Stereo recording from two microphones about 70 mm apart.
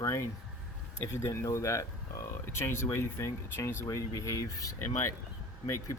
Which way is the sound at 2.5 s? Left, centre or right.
Left.